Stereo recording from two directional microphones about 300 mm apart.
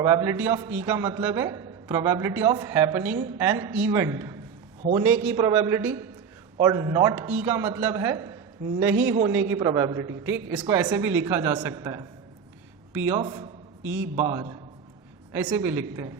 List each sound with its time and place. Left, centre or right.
0.0 s a man's voice: centre
5.0 s a man's voice: centre
9.5 s a man's voice: centre